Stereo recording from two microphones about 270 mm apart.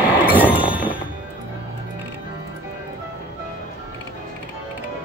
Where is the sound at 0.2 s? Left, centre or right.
Centre.